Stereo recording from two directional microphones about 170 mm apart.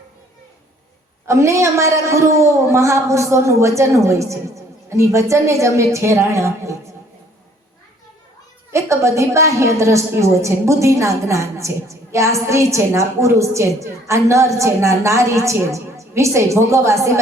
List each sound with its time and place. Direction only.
1.3 s a woman's voice: 15° right (ahead or behind)
8.7 s a woman's voice: 15° right (ahead or behind)